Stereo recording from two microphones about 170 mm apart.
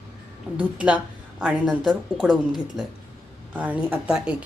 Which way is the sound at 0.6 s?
5° right (ahead or behind).